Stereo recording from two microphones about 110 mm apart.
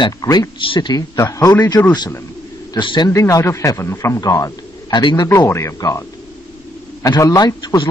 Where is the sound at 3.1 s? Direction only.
30° left (ahead or behind).